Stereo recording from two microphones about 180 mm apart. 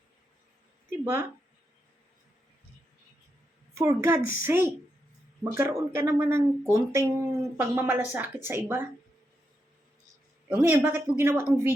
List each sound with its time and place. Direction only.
0.9 s a sound: 15° right (ahead or behind)
3.8 s speech: 15° right (ahead or behind)
10.5 s speech: 15° right (ahead or behind)